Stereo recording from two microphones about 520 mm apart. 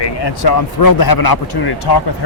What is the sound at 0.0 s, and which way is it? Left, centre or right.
A man's voice, left.